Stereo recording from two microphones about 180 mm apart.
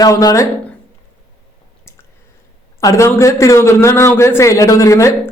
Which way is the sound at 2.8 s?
15° left (ahead or behind).